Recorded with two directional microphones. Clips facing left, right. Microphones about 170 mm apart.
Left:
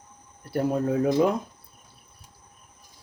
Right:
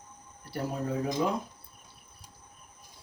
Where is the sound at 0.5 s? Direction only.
60° left (ahead or behind).